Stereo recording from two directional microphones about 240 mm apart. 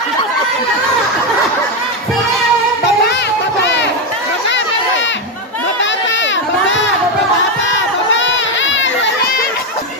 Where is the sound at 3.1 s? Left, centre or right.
Left.